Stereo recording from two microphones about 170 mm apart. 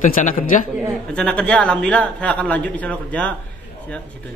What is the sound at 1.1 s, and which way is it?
A man's voice, 5° left (ahead or behind).